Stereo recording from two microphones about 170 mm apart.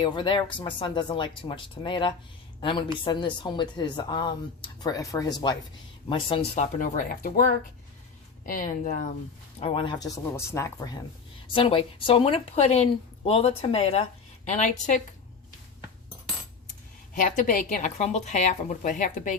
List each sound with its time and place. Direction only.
0.0 s speech: 30° left (ahead or behind)
6.7 s a woman's voice: 50° left (ahead or behind)
9.6 s speech: 30° left (ahead or behind)
10.3 s speech: 15° left (ahead or behind); by 15.0 s 45° left (ahead or behind)
17.2 s a woman's voice: 50° left (ahead or behind)